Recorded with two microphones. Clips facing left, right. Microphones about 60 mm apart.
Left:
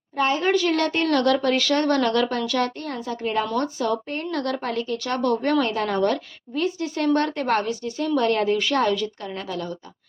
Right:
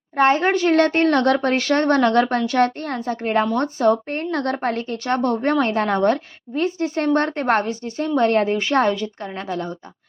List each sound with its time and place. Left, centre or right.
0.2 s a woman's voice: right